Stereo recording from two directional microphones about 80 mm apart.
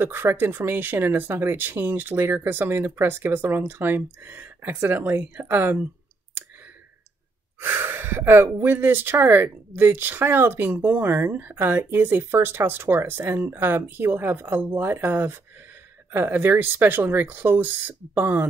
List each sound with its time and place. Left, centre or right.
0.0 s speech: right
7.6 s speech: right